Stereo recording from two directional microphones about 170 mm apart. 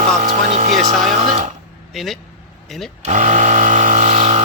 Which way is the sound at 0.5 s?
45° right (ahead or behind).